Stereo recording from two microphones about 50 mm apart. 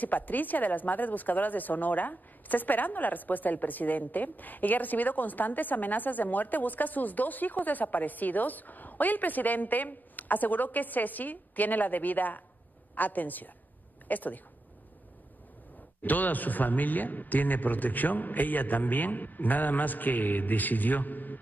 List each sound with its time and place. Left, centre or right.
0.0 s a woman's voice: left
16.0 s a woman's voice: left